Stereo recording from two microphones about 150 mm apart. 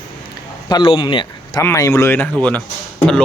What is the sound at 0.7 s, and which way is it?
Speech, 35° left (ahead or behind).